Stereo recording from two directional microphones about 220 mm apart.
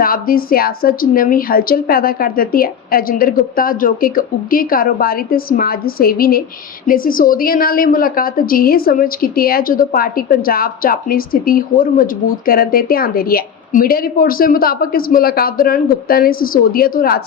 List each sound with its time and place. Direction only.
0.0 s a woman's voice: 40° left (ahead or behind)